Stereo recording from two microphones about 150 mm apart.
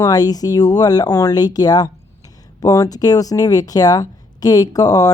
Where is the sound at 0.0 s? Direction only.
25° left (ahead or behind).